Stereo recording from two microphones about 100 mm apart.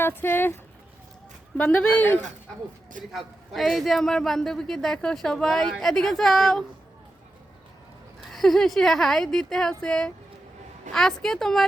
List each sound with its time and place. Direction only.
0.0 s speech: 20° left (ahead or behind)
1.5 s speech: 10° left (ahead or behind)
3.1 s a man's voice: centre (ahead or behind)
8.3 s a man's voice: centre (ahead or behind)